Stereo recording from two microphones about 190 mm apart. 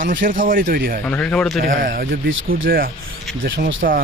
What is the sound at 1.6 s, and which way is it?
Speech, 45° right (ahead or behind).